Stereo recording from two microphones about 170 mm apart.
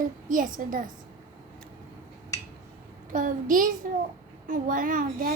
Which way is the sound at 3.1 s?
55° right (ahead or behind).